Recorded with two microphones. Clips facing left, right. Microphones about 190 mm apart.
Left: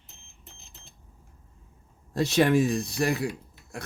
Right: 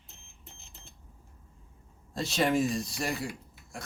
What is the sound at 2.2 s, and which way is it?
Speech, 65° left (ahead or behind).